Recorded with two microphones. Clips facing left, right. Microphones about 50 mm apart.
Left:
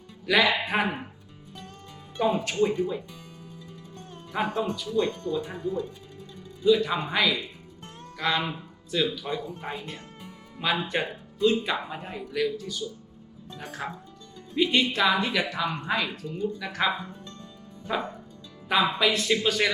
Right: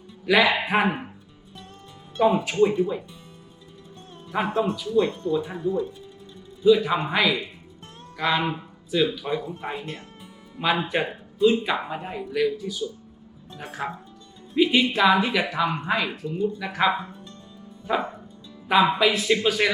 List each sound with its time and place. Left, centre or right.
0.3 s speech: centre
2.1 s speech: centre
4.3 s speech: right
6.7 s speech: centre
9.5 s speech: right
14.5 s music: centre
14.9 s speech: centre
16.2 s speech: right